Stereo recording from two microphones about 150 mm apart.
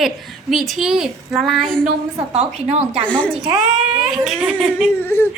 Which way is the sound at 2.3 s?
45° right (ahead or behind).